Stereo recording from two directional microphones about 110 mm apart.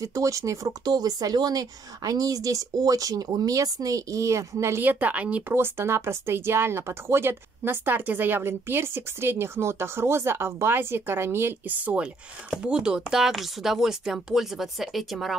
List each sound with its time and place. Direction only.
0.0 s speech: 30° right (ahead or behind); by 15.3 s centre (ahead or behind)